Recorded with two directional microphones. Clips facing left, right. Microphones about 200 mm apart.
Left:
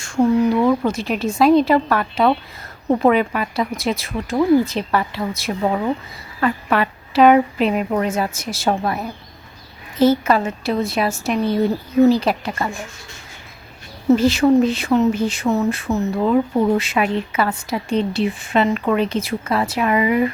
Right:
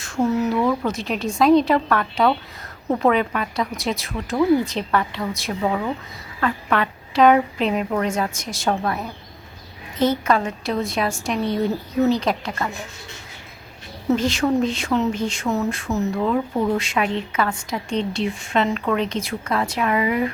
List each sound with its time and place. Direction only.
0.3 s a woman's voice: centre (ahead or behind)
5.6 s a woman's voice: 15° left (ahead or behind)
8.7 s a woman's voice: 15° left (ahead or behind)
14.1 s a woman's voice: 5° left (ahead or behind)
16.2 s a woman's voice: 10° left (ahead or behind)